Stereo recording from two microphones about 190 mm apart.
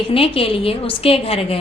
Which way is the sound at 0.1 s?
30° left (ahead or behind).